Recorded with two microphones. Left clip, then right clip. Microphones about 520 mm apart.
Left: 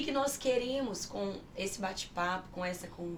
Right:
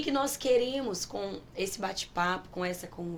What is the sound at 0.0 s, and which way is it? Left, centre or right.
A woman's voice, right.